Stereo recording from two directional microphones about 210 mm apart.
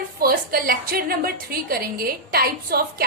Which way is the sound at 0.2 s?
45° right (ahead or behind).